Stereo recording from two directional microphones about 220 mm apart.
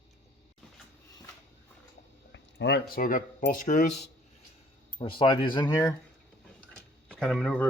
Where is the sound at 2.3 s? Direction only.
50° left (ahead or behind).